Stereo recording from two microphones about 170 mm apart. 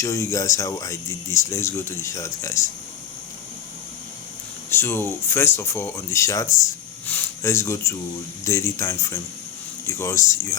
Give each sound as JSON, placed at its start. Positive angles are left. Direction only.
{"t": 0.0, "sound": "speech", "side_deg": 20}
{"t": 4.7, "sound": "speech", "side_deg": 15}